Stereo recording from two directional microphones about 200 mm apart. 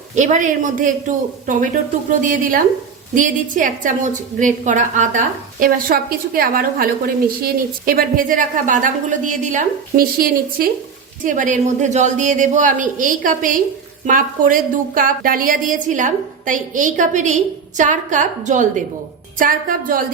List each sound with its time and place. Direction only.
0.2 s a woman's voice: 40° right (ahead or behind)
2.2 s a woman's voice: 40° right (ahead or behind)